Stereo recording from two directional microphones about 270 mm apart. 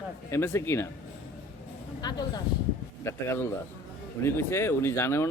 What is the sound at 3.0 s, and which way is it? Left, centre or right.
Speech, centre.